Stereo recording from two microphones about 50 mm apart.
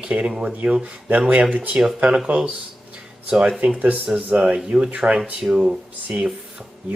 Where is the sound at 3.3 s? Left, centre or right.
Centre.